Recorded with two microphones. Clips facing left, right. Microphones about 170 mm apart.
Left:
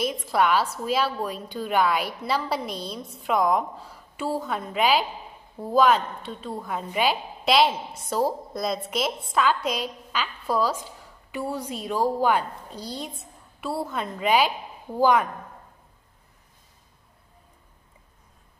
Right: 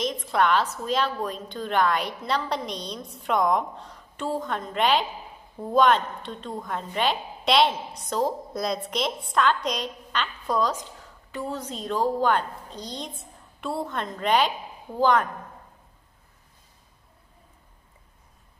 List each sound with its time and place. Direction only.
0.3 s a woman's voice: 5° left (ahead or behind)